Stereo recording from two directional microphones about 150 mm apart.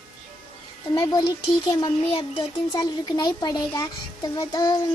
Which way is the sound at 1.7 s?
30° left (ahead or behind).